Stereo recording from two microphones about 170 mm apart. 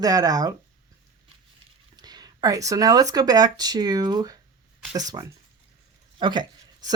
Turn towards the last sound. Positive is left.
turn(degrees=-25)  # may be behind; listen again after turning